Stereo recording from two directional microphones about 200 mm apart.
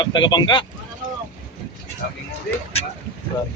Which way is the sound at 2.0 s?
50° left (ahead or behind).